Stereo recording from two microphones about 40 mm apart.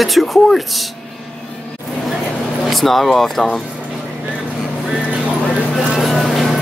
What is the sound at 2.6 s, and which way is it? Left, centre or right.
Speech, centre.